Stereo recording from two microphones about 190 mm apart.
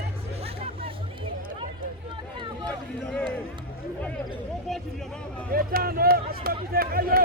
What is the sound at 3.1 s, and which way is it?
Speech, 5° left (ahead or behind).